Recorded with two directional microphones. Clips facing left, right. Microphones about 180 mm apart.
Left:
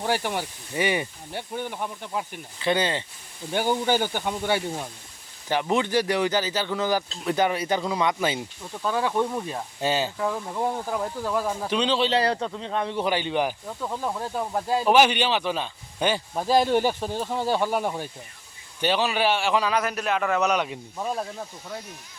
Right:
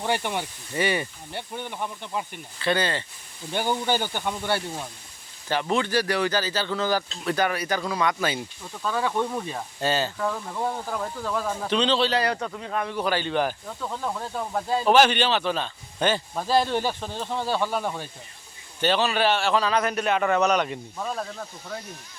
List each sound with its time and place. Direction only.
0.0 s speech: 5° left (ahead or behind)
2.6 s speech: 20° left (ahead or behind)
12.1 s speech: 30° left (ahead or behind); by 21.4 s 10° left (ahead or behind)